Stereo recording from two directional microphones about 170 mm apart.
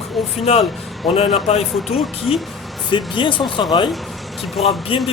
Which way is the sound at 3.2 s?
30° left (ahead or behind).